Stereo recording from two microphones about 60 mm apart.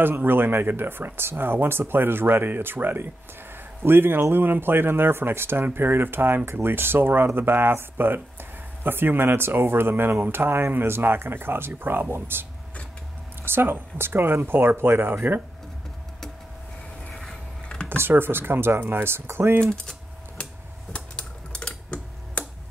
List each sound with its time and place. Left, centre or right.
0.0 s speech: right
13.5 s speech: right
17.1 s a sound: centre
17.8 s speech: right
19.7 s typing: centre